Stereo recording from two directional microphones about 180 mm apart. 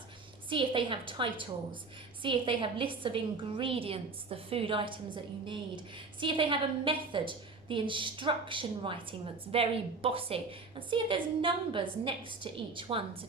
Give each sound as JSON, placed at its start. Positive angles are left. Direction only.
{"t": 0.5, "sound": "a woman's voice", "side_deg": -30}